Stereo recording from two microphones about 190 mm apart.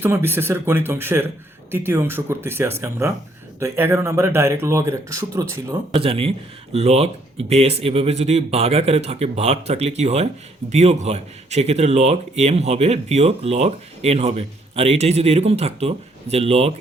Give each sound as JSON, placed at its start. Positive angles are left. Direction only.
{"t": 0.0, "sound": "speech", "side_deg": -10}
{"t": 5.9, "sound": "speech", "side_deg": -30}